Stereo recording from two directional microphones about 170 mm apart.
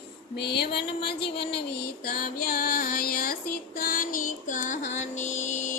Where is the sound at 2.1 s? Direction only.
60° left (ahead or behind); by 5.7 s 45° left (ahead or behind).